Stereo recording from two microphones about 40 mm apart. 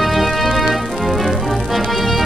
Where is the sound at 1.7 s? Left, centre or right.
Centre.